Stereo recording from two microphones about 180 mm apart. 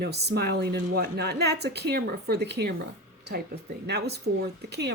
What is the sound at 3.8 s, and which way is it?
Speech, 65° right (ahead or behind).